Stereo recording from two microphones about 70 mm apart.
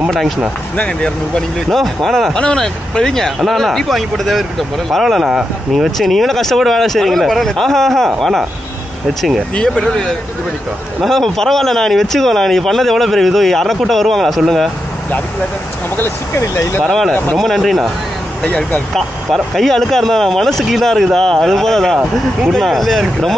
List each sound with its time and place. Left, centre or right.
0.7 s speech: centre
5.9 s speech: centre
9.6 s speech: centre
16.0 s speech: left
16.8 s speech: centre
18.4 s speech: centre
18.9 s speech: centre